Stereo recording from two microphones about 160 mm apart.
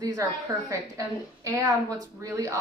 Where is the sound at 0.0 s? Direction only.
20° right (ahead or behind).